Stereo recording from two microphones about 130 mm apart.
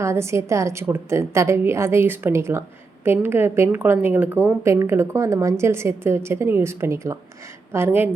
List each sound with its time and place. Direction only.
0.0 s a woman's voice: 20° right (ahead or behind)